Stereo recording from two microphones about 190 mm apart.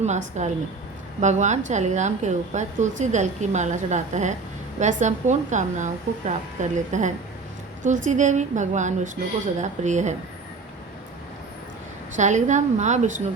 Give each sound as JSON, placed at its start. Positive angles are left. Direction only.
{"t": 0.4, "sound": "a woman's voice", "side_deg": -35}
{"t": 12.1, "sound": "a woman's voice", "side_deg": -40}